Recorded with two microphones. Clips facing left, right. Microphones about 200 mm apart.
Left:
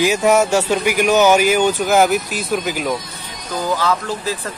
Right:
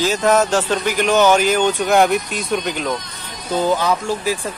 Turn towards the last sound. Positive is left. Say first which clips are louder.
# right 1 dB
turn(degrees=-15)  # may be behind; listen again after turning